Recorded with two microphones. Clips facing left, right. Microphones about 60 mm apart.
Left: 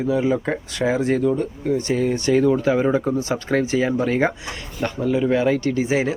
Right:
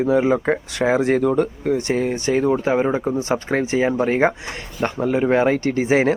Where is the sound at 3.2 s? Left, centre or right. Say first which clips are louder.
Right 1 dB; right.